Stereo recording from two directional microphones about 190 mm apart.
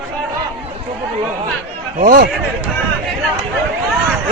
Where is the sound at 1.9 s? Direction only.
45° right (ahead or behind).